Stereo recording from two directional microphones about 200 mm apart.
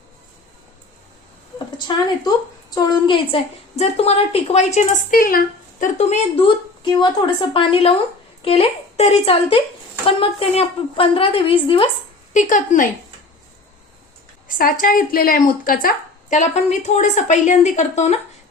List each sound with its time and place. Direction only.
2.7 s a woman's voice: 20° left (ahead or behind)
12.3 s speech: 40° left (ahead or behind)
14.4 s speech: 45° left (ahead or behind)